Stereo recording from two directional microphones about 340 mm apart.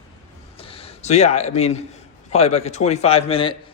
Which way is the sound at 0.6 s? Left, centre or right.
Centre.